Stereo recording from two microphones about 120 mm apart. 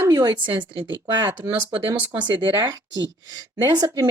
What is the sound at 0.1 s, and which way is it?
A woman's voice, 35° right (ahead or behind).